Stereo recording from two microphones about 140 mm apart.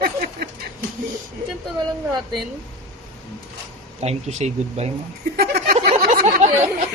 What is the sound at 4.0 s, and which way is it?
Speech, 50° right (ahead or behind).